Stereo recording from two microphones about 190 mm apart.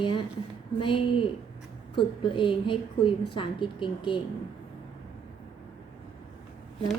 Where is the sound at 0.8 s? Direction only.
25° left (ahead or behind).